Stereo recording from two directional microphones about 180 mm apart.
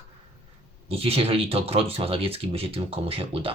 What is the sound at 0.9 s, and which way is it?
Speech, 35° right (ahead or behind).